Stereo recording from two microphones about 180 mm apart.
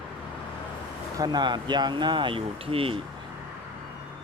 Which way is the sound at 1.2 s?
25° right (ahead or behind).